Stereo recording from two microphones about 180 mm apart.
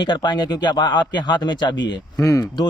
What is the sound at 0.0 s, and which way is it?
Speech, 25° left (ahead or behind).